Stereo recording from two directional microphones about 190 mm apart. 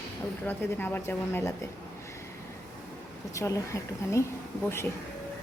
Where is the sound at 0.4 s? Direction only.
10° left (ahead or behind).